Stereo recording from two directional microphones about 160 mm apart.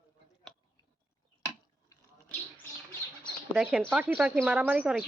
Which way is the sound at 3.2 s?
Centre (ahead or behind).